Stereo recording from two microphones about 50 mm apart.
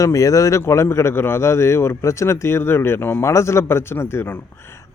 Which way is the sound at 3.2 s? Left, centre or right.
Left.